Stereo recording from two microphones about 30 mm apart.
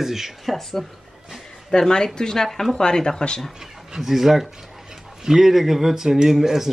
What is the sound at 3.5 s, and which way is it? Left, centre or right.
A woman's voice, centre.